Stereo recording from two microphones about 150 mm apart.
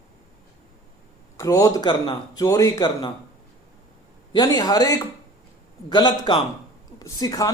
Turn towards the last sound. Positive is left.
turn(degrees=25)  # may be behind; listen again after turning